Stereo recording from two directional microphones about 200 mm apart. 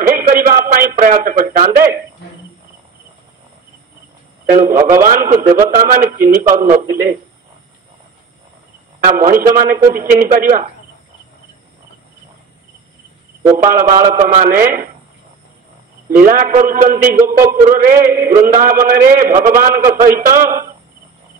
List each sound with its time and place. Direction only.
0.0 s a sound: 45° right (ahead or behind)
4.5 s a man's voice: 45° right (ahead or behind)
9.0 s a man's voice: 40° right (ahead or behind)
13.6 s a man's voice: 45° right (ahead or behind)
16.1 s a man's voice: 45° right (ahead or behind)